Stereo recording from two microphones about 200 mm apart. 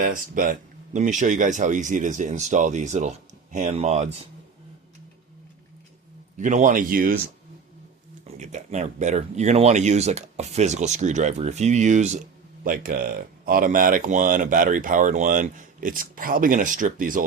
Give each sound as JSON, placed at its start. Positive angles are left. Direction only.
{"t": 0.0, "sound": "speech", "side_deg": -45}
{"t": 6.3, "sound": "speech", "side_deg": -40}
{"t": 8.4, "sound": "speech", "side_deg": -35}